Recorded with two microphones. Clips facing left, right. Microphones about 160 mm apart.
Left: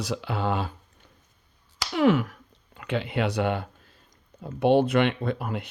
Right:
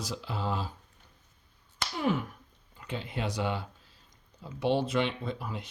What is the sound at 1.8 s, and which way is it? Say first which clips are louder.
Speech: left 9 dB; 90° left.